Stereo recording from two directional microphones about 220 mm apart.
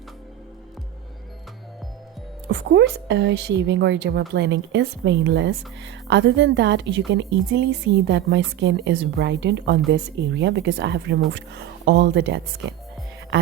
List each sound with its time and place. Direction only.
2.5 s a woman's voice: 50° right (ahead or behind)